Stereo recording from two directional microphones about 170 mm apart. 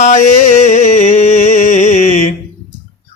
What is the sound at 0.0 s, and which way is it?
Music, 45° left (ahead or behind).